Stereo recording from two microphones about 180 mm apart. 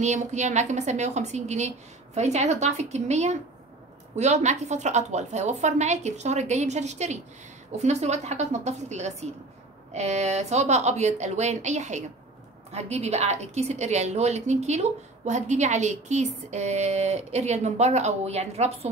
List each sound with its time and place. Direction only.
0.0 s a woman's voice: 40° right (ahead or behind)